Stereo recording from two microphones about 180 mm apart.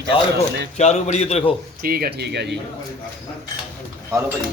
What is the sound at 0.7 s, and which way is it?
Speech, 40° left (ahead or behind).